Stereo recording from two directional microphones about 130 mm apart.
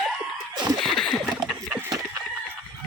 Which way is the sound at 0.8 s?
5° left (ahead or behind).